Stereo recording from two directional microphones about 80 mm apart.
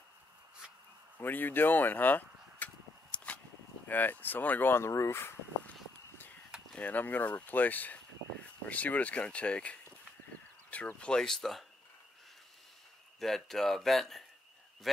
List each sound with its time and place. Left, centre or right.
1.1 s a sound: left
3.8 s speech: left
6.7 s speech: centre
11.0 s speech: centre
13.2 s speech: centre